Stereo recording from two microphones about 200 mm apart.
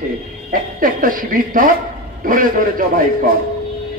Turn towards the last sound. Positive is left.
turn(degrees=-45)  # may be behind; listen again after turning